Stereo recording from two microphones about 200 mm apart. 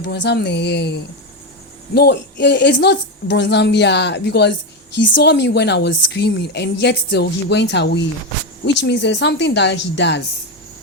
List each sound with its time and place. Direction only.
0.0 s a woman's voice: 55° left (ahead or behind)